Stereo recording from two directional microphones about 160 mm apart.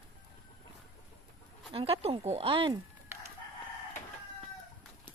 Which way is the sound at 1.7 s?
35° right (ahead or behind).